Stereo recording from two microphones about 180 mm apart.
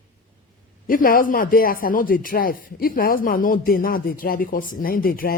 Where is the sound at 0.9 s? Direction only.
50° left (ahead or behind).